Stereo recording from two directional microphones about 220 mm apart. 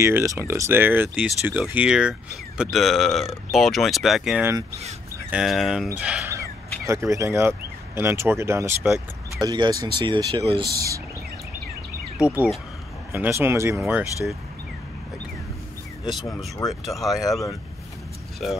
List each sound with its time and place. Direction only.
0.0 s speech: 10° right (ahead or behind)
4.6 s speech: 30° right (ahead or behind)
5.3 s speech: centre (ahead or behind); by 10.7 s 25° right (ahead or behind)
12.2 s speech: 5° right (ahead or behind)
16.1 s speech: centre (ahead or behind)